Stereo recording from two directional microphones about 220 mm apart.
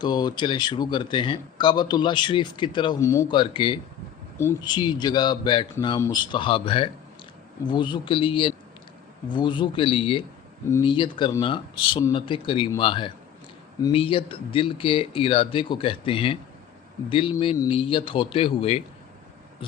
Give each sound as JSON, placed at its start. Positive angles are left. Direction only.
{"t": 0.0, "sound": "speech", "side_deg": 20}